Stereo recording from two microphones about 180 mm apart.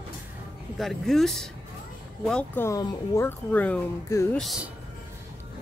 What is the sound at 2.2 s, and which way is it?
Speech, 10° left (ahead or behind).